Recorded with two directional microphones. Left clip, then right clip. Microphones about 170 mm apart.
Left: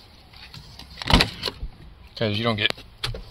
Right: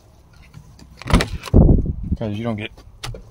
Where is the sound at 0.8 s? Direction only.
70° right (ahead or behind).